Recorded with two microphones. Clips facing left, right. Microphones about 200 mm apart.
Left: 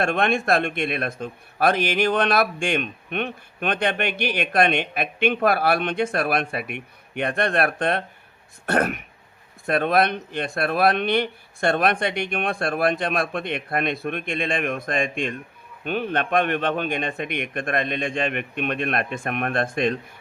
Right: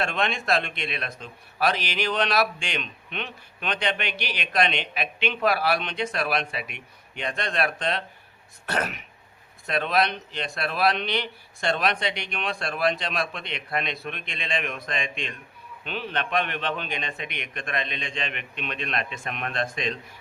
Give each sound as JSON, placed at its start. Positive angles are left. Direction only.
{"t": 0.0, "sound": "a man's voice", "side_deg": 50}